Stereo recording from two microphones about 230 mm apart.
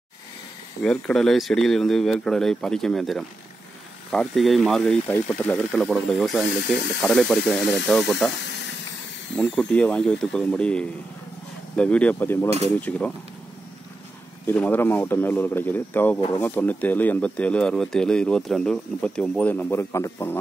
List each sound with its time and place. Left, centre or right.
0.8 s speech: centre
12.4 s cutlery: right
14.4 s speech: centre